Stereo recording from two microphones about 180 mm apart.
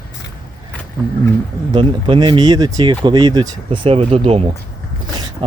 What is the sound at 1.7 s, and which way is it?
Speech, 25° right (ahead or behind).